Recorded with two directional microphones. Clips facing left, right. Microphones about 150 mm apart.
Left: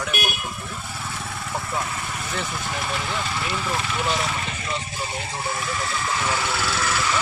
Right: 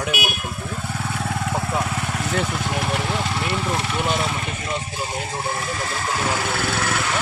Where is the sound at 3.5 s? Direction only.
25° right (ahead or behind).